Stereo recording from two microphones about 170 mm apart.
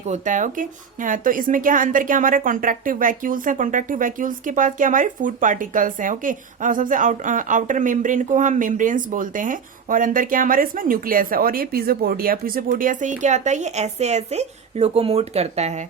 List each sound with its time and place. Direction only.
0.1 s speech: 50° right (ahead or behind)